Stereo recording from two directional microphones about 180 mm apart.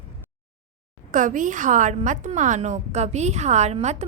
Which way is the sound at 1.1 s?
45° right (ahead or behind).